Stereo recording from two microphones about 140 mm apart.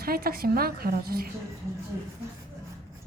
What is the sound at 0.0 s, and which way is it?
Speech, 90° right.